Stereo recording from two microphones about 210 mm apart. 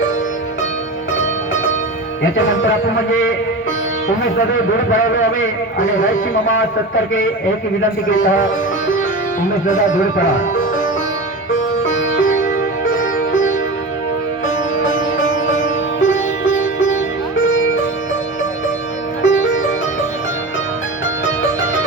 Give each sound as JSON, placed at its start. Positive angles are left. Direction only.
{"t": 2.3, "sound": "a man's voice", "side_deg": 65}
{"t": 5.4, "sound": "a man's voice", "side_deg": 65}
{"t": 8.0, "sound": "a man's voice", "side_deg": 70}
{"t": 11.5, "sound": "sitar", "side_deg": 65}
{"t": 12.9, "sound": "music", "side_deg": 40}
{"t": 15.5, "sound": "sitar", "side_deg": 65}
{"t": 17.4, "sound": "sitar", "side_deg": 65}
{"t": 19.2, "sound": "sitar", "side_deg": 65}